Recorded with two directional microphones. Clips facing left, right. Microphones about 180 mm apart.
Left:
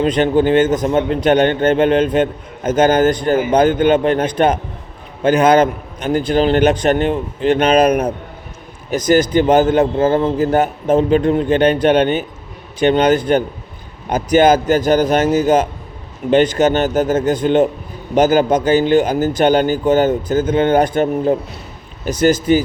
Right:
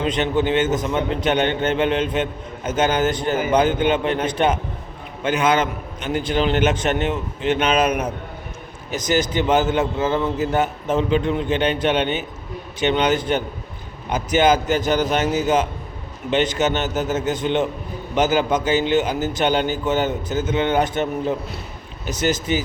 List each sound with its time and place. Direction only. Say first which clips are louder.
0.0 s a man's voice: left 7 dB; 45° left (ahead or behind)
8.9 s a man's voice: left 8 dB; 50° left (ahead or behind)